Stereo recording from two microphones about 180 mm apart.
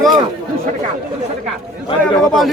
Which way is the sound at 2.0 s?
5° left (ahead or behind).